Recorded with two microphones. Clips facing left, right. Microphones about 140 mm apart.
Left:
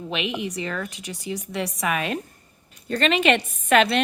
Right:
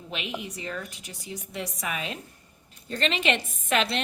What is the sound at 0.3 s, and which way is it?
A woman's voice, 80° left.